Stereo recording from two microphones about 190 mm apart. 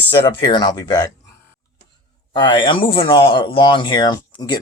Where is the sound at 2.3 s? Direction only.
25° left (ahead or behind).